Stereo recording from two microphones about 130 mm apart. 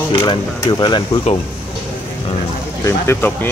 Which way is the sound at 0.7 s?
35° left (ahead or behind).